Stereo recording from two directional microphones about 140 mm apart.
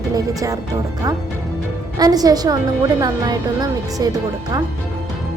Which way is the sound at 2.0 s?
25° right (ahead or behind).